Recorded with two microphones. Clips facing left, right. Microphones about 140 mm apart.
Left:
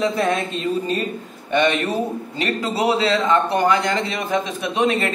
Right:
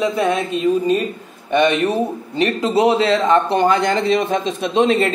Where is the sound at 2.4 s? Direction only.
25° right (ahead or behind).